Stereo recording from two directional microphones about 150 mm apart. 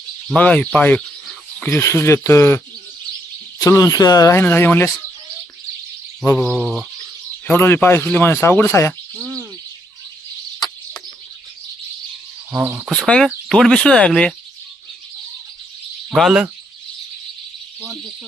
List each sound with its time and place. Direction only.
0.3 s speech: 5° left (ahead or behind)
3.6 s speech: 25° left (ahead or behind)
6.3 s speech: 5° left (ahead or behind)
7.4 s speech: 15° left (ahead or behind)
12.5 s insect: 15° right (ahead or behind)
12.9 s speech: 5° left (ahead or behind)
16.0 s speech: centre (ahead or behind)